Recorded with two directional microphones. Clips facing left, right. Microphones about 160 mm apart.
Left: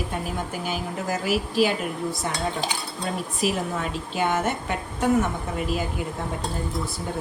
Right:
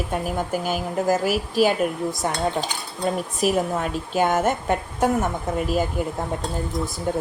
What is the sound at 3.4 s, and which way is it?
A woman's voice, 45° right (ahead or behind).